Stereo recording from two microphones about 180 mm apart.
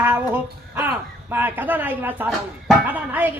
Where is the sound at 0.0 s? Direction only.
10° right (ahead or behind).